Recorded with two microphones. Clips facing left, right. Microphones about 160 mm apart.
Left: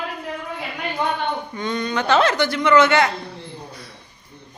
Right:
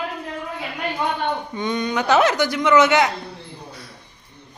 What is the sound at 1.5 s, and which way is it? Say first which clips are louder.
A woman's voice: right 1 dB; 15° right (ahead or behind).